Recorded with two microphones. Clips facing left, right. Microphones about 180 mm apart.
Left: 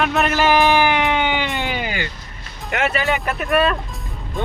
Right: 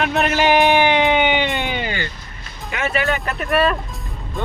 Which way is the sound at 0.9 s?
20° right (ahead or behind).